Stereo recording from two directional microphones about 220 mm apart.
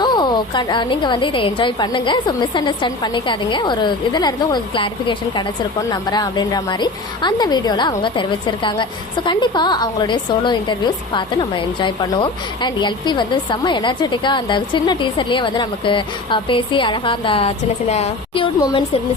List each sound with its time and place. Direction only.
0.0 s a woman's voice: 20° left (ahead or behind)